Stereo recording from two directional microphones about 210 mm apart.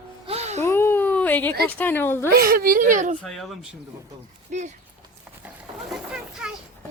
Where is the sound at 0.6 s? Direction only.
10° left (ahead or behind).